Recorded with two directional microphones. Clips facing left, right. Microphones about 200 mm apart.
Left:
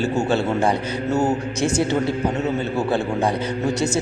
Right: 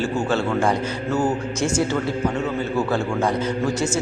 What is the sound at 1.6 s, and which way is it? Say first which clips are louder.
Speech: left 1 dB; 60° left (ahead or behind).